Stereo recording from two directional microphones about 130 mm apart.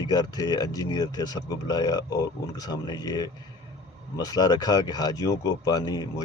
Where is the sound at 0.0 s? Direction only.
30° left (ahead or behind).